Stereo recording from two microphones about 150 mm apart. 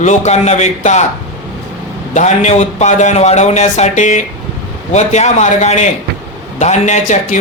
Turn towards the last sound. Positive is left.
turn(degrees=55)  # may be behind; listen again after turning